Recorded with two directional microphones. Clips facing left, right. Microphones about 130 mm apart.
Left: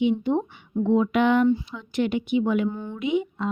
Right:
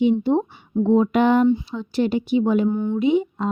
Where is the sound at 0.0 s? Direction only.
35° right (ahead or behind).